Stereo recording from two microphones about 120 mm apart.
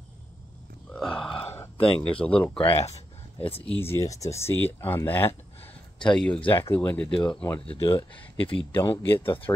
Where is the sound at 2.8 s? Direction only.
60° left (ahead or behind).